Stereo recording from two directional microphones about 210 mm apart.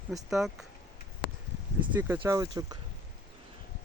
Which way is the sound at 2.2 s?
15° right (ahead or behind).